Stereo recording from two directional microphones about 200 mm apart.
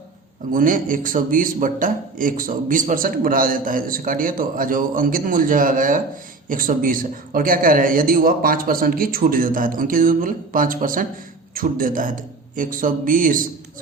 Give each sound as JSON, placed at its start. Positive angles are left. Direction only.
{"t": 0.5, "sound": "a man's voice", "side_deg": -40}